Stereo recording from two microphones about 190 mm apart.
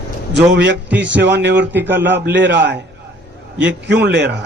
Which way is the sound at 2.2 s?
65° right (ahead or behind).